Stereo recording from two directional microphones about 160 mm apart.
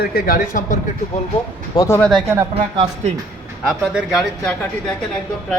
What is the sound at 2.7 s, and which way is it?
Speech, 40° right (ahead or behind).